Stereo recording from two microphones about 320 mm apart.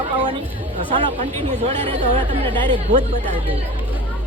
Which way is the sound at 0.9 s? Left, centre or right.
Right.